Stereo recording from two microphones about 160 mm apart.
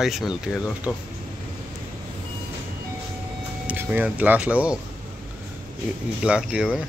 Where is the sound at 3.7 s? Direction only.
10° right (ahead or behind).